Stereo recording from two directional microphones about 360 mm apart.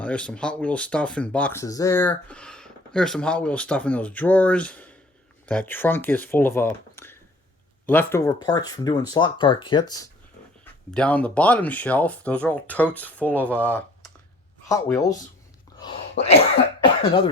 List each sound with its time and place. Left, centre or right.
0.0 s speech: centre
10.9 s speech: centre
16.8 s cough: centre